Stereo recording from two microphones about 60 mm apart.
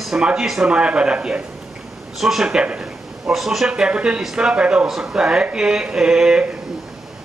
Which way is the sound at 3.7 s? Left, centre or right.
Centre.